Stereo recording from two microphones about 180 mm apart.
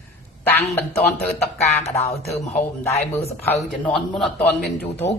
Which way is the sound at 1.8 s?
40° left (ahead or behind).